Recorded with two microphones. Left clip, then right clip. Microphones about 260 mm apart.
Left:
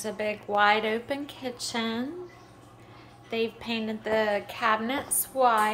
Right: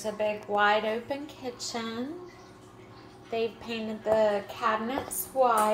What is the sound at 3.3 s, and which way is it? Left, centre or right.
A woman's voice, centre.